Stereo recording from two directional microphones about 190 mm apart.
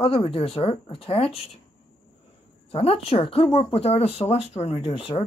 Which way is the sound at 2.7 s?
30° left (ahead or behind).